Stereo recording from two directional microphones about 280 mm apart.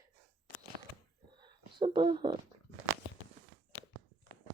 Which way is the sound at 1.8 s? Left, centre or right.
Centre.